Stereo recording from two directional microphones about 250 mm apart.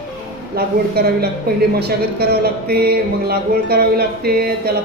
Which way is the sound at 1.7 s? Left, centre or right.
Right.